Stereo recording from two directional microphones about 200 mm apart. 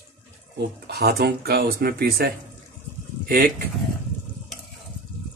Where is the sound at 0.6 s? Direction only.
55° right (ahead or behind).